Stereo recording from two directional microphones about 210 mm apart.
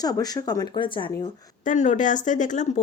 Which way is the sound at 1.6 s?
35° left (ahead or behind).